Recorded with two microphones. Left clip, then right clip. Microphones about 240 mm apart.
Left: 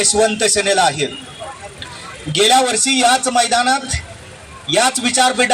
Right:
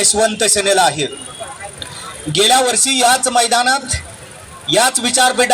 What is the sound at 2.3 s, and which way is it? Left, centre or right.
A man's voice, right.